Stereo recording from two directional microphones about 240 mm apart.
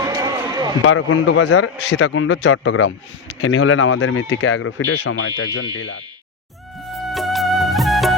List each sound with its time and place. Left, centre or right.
0.0 s a sound: centre
0.9 s a man's voice: left
6.9 s music: centre